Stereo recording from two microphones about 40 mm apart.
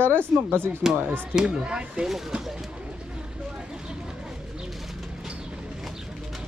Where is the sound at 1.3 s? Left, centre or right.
Centre.